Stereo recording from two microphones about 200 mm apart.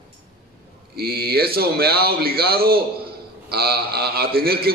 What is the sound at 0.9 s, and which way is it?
A man's voice, 50° right (ahead or behind).